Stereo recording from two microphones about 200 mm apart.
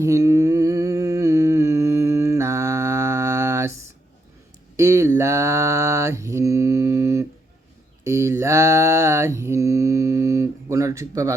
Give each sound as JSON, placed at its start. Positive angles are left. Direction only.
{"t": 0.0, "sound": "humming", "side_deg": -15}
{"t": 4.8, "sound": "mantra", "side_deg": -15}